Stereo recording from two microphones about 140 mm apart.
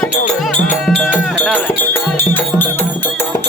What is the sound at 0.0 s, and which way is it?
Music, 5° left (ahead or behind).